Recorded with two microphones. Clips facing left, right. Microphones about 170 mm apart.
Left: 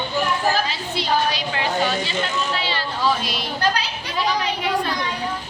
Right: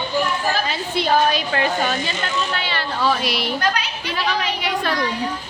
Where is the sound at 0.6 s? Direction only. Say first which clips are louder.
Right 3 dB; 55° right (ahead or behind); by 4.9 s 75° right (ahead or behind).